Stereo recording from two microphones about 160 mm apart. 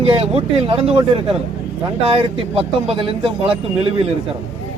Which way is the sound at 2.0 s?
35° right (ahead or behind).